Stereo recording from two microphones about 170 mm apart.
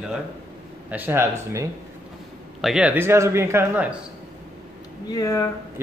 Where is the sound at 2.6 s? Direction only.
Centre (ahead or behind).